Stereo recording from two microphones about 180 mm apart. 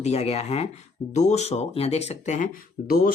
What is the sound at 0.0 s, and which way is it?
Speech, 35° left (ahead or behind).